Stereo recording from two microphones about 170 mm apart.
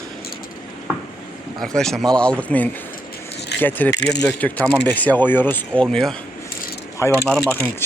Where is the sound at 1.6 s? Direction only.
5° left (ahead or behind).